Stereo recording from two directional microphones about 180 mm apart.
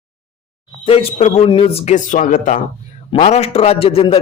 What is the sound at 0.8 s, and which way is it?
A man's voice, 30° left (ahead or behind).